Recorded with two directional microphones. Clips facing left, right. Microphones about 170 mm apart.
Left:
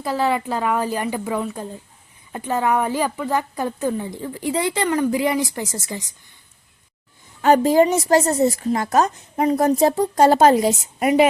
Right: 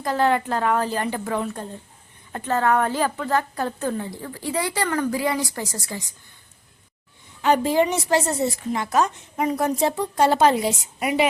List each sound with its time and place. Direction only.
0.0 s speech: 5° left (ahead or behind)
7.4 s a woman's voice: 45° left (ahead or behind)